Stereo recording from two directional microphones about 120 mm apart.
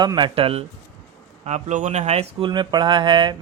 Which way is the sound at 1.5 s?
70° right (ahead or behind).